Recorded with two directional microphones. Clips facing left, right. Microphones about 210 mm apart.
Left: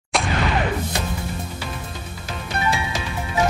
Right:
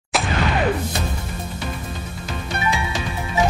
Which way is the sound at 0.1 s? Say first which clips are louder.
Even; centre (ahead or behind).